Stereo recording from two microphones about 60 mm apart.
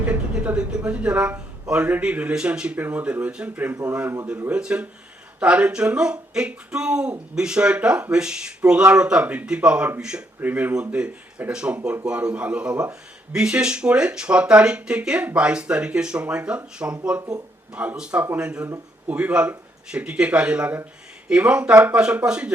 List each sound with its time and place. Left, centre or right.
0.0 s a man's voice: right
2.7 s a man's voice: right
10.4 s speech: right
10.8 s a man's voice: centre